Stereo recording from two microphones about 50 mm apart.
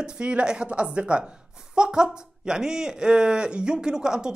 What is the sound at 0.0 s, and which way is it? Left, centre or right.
A woman's voice, centre.